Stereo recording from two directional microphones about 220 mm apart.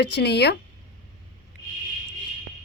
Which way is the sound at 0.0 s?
50° left (ahead or behind).